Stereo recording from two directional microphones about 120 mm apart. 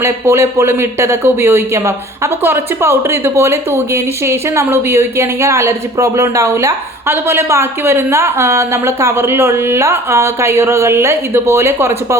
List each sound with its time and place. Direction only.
0.0 s speech: 20° right (ahead or behind)